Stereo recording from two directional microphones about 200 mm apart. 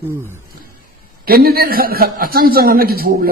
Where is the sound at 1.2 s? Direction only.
50° right (ahead or behind).